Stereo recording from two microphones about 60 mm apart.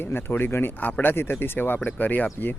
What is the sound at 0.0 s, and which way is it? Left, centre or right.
Speech, left.